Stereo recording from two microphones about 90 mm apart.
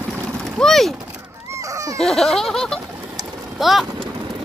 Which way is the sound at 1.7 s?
40° right (ahead or behind).